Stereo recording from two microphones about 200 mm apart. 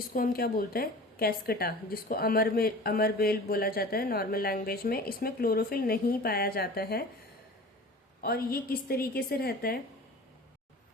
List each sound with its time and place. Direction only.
0.1 s a woman's voice: 50° left (ahead or behind)
8.2 s a woman's voice: 50° left (ahead or behind)